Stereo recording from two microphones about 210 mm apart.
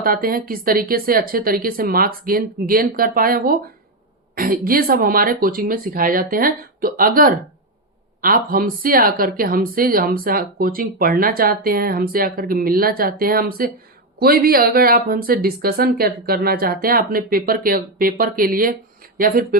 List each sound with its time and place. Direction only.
0.0 s speech: 45° right (ahead or behind)